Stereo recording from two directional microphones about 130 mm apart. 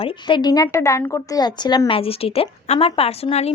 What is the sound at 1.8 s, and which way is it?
Speech, 45° left (ahead or behind).